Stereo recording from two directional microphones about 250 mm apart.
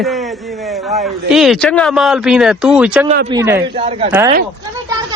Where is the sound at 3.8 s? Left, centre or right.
Right.